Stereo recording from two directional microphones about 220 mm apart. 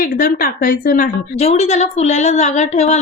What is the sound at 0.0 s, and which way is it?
A woman's voice, 40° left (ahead or behind).